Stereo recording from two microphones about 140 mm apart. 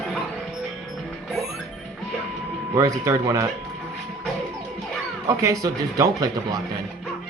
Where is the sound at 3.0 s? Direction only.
20° right (ahead or behind).